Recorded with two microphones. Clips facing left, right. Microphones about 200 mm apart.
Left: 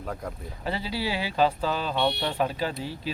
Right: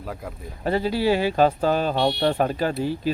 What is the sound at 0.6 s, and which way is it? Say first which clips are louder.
Speech: right 8 dB; 50° right (ahead or behind).